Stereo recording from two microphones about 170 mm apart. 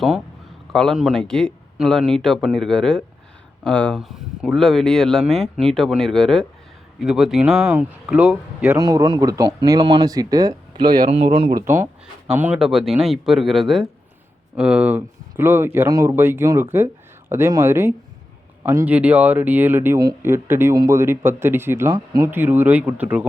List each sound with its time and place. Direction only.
0.7 s speech: centre (ahead or behind)
8.8 s speech: 20° right (ahead or behind)
11.1 s speech: 35° right (ahead or behind)
11.6 s speech: 15° right (ahead or behind)